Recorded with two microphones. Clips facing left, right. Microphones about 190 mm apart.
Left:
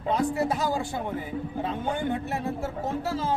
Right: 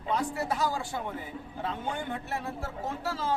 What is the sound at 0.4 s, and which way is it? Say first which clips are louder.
Speech: left 4 dB; 20° left (ahead or behind).